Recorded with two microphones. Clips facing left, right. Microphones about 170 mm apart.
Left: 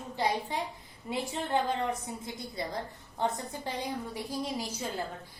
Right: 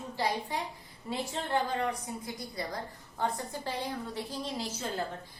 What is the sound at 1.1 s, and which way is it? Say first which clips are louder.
A woman's voice: left 1 dB; 20° left (ahead or behind).